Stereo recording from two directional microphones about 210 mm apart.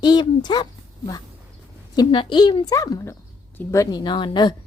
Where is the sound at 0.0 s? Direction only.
20° left (ahead or behind).